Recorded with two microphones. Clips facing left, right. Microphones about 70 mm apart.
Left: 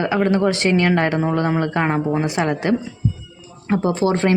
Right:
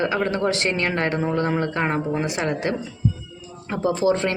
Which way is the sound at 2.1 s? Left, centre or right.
Left.